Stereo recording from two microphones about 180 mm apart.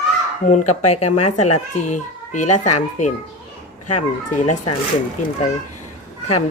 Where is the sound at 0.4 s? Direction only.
40° left (ahead or behind).